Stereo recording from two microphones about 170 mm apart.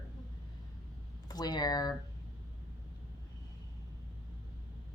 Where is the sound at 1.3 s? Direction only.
25° left (ahead or behind).